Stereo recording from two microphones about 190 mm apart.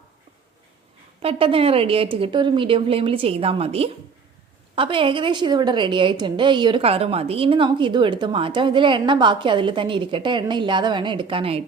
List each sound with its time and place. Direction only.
1.2 s a woman's voice: 30° right (ahead or behind)